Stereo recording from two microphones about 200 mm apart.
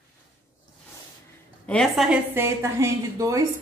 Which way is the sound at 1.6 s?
5° left (ahead or behind).